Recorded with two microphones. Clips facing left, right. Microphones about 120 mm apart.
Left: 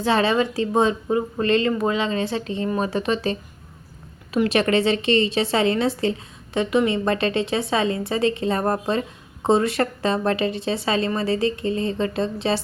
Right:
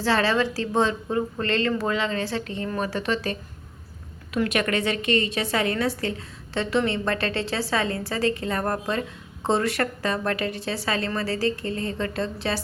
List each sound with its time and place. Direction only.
0.0 s a woman's voice: 20° left (ahead or behind)
4.4 s a woman's voice: 30° left (ahead or behind)